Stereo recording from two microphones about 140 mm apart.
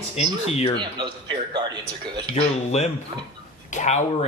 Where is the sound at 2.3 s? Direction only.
50° left (ahead or behind).